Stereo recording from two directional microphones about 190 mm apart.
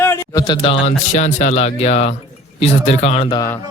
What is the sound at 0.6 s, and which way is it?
Speech, 35° left (ahead or behind).